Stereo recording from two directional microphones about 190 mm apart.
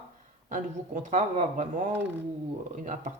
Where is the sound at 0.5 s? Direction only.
40° right (ahead or behind).